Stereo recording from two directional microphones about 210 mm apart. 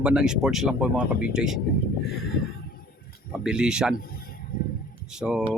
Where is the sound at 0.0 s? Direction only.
5° right (ahead or behind).